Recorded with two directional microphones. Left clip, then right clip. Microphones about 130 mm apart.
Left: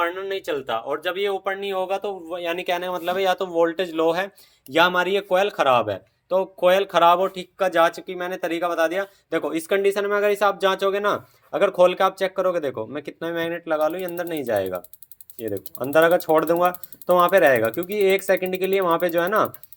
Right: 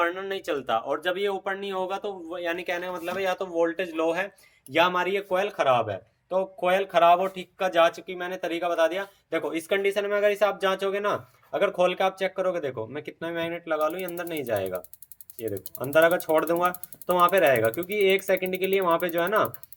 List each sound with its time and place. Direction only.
0.0 s a man's voice: 5° left (ahead or behind); by 14.8 s 30° left (ahead or behind)
15.9 s speech: 30° left (ahead or behind)